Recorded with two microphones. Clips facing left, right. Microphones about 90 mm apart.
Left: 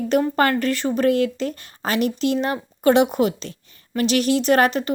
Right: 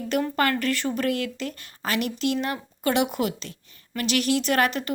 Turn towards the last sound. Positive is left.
turn(degrees=25)  # may be behind; listen again after turning